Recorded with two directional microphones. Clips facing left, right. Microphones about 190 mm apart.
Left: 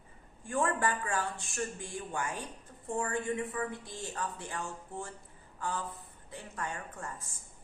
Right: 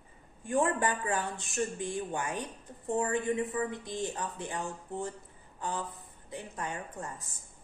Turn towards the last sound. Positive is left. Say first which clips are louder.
# right 2 dB
turn(degrees=-20)  # may be behind; listen again after turning